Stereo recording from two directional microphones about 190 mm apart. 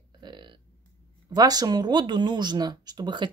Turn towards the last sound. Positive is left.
turn(degrees=-20)  # may be behind; listen again after turning